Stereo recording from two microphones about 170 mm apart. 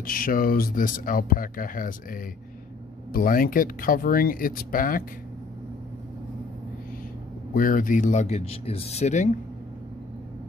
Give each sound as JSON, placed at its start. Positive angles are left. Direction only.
{"t": 0.0, "sound": "speech", "side_deg": 55}
{"t": 7.5, "sound": "speech", "side_deg": 55}